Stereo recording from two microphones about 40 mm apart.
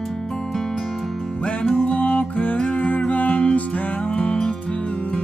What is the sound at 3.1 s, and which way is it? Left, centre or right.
Music, left.